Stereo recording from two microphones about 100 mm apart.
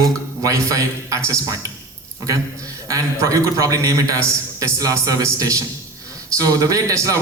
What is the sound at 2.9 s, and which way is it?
A man's voice, 35° right (ahead or behind).